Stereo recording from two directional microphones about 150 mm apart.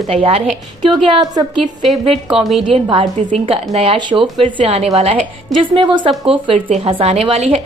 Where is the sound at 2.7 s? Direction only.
35° right (ahead or behind).